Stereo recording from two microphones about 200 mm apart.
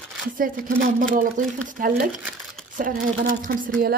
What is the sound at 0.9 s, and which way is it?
A woman's voice, 40° right (ahead or behind).